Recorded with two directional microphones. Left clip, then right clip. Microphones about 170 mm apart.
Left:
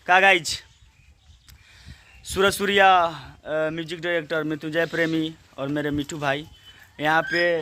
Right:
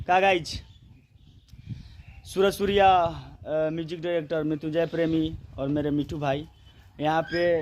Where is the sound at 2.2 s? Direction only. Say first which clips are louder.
Left 3 dB; 10° left (ahead or behind).